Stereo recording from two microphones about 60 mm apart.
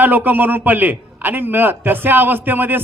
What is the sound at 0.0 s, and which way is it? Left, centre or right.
A man's voice, right.